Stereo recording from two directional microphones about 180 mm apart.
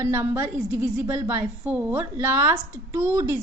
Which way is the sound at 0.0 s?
15° right (ahead or behind).